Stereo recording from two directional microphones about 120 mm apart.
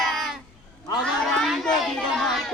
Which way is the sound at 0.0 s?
Centre (ahead or behind).